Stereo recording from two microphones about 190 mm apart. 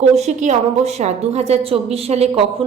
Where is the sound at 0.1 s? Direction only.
35° right (ahead or behind).